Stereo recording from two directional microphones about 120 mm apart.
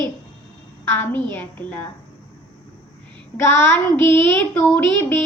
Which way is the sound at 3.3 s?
15° left (ahead or behind).